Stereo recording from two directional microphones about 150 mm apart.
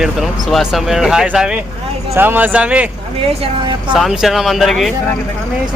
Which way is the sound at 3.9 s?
5° right (ahead or behind).